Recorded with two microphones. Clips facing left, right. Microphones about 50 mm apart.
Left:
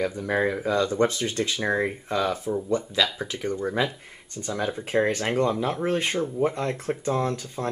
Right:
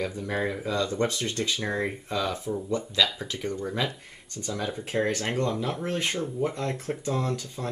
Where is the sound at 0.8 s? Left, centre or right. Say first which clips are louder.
Left 4 dB; left.